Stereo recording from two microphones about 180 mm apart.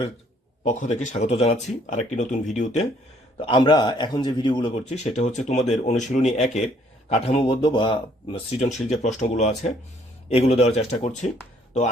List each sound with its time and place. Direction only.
0.6 s speech: 40° left (ahead or behind)
3.3 s a man's voice: 25° left (ahead or behind)
4.9 s speech: 40° left (ahead or behind)